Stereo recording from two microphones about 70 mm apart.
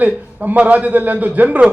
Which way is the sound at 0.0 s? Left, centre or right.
Right.